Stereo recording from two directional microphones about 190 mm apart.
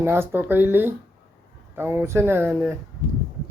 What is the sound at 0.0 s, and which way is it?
A man's voice, 10° right (ahead or behind).